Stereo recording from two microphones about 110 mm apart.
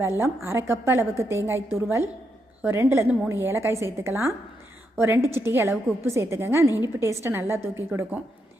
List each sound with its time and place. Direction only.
0.0 s a woman's voice: 20° right (ahead or behind)